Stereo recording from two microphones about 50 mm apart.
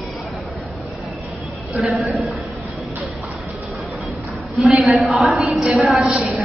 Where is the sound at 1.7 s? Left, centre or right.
Centre.